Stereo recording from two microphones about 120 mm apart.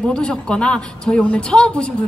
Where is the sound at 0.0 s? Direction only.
5° left (ahead or behind).